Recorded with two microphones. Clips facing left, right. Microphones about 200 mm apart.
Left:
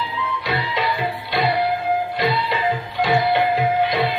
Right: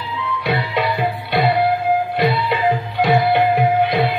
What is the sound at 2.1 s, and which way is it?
Music, 60° right (ahead or behind).